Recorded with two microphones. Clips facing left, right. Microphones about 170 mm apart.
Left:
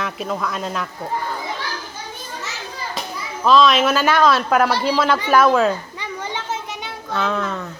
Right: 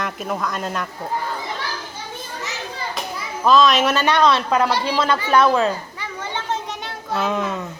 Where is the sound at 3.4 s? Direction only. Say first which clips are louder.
Left 1 dB; centre (ahead or behind).